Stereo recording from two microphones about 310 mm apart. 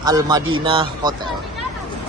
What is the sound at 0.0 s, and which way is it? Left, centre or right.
Speech, centre.